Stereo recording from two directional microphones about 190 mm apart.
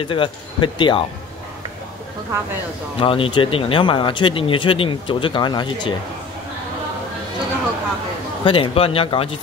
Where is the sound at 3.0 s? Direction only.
25° left (ahead or behind).